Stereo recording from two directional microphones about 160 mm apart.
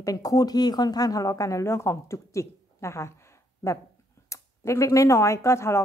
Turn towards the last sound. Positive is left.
turn(degrees=15)  # may be behind; listen again after turning